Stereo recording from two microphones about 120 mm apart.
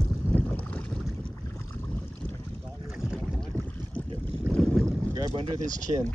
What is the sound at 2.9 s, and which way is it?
Boat, 5° right (ahead or behind).